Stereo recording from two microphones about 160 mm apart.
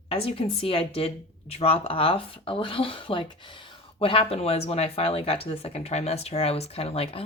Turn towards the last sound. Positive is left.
turn(degrees=35)  # may be behind; listen again after turning